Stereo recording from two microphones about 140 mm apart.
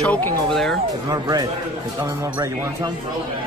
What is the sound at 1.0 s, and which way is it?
Speech, 30° right (ahead or behind).